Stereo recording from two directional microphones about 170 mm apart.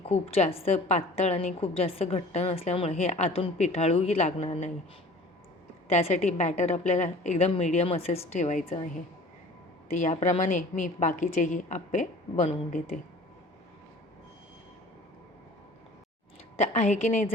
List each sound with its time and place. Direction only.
0.0 s a woman's voice: 35° left (ahead or behind)
5.9 s a woman's voice: 40° left (ahead or behind)
10.0 s a woman's voice: 45° left (ahead or behind)
16.6 s a woman's voice: 45° left (ahead or behind)